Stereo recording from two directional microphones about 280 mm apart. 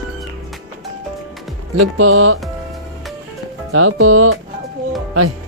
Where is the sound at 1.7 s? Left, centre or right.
Right.